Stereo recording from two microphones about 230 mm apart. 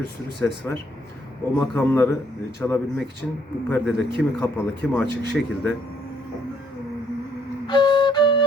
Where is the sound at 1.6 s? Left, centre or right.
Centre.